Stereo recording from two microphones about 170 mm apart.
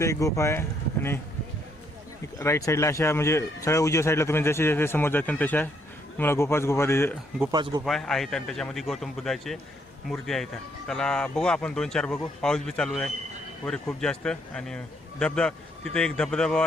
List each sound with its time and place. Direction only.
0.0 s speech: 20° left (ahead or behind)
2.4 s speech: 20° left (ahead or behind)
7.5 s a man's voice: 25° right (ahead or behind)
7.9 s speech: 5° left (ahead or behind)